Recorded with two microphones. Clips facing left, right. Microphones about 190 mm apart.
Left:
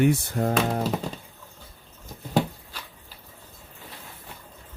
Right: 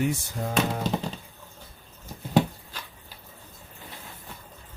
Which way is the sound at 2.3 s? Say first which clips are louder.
Right 2 dB; centre (ahead or behind).